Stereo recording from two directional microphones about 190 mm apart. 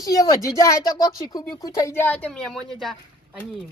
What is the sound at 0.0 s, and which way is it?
A woman's voice, 20° left (ahead or behind).